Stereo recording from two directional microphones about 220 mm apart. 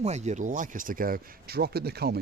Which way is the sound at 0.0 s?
30° right (ahead or behind).